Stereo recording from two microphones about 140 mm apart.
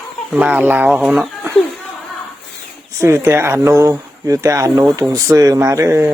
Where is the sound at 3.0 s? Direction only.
20° right (ahead or behind).